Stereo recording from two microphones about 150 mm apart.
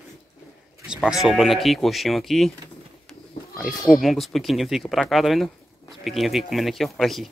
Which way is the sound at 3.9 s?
Centre (ahead or behind).